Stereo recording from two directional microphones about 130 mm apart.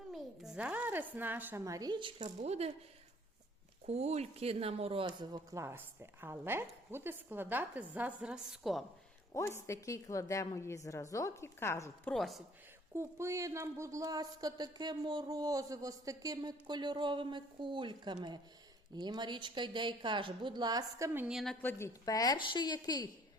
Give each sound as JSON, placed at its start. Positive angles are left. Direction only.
{"t": 0.1, "sound": "a sound", "side_deg": 0}
{"t": 1.6, "sound": "speech", "side_deg": -25}
{"t": 2.1, "sound": "speech", "side_deg": -60}
{"t": 3.8, "sound": "speech", "side_deg": -55}
{"t": 5.0, "sound": "a woman's voice", "side_deg": -30}
{"t": 9.3, "sound": "a woman's voice", "side_deg": 20}
{"t": 12.1, "sound": "a woman's voice", "side_deg": 0}
{"t": 12.9, "sound": "speech", "side_deg": -20}
{"t": 21.2, "sound": "a woman's voice", "side_deg": 0}
{"t": 21.6, "sound": "a woman's voice", "side_deg": 15}
{"t": 22.0, "sound": "a woman's voice", "side_deg": 30}